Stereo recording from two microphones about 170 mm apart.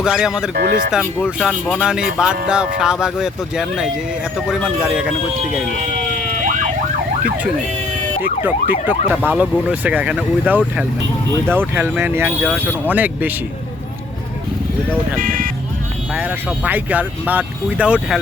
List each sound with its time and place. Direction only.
0.0 s speech: 5° right (ahead or behind)
0.5 s speech: 60° right (ahead or behind)
1.4 s speech: centre (ahead or behind)
7.2 s ambulance: 5° right (ahead or behind)
15.2 s speech: 55° right (ahead or behind)
16.1 s ambulance: 5° right (ahead or behind)